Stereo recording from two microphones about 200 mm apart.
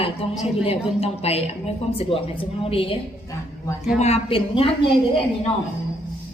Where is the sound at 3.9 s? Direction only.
30° left (ahead or behind).